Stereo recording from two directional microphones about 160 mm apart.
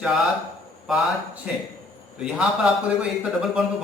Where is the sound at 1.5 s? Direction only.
10° right (ahead or behind).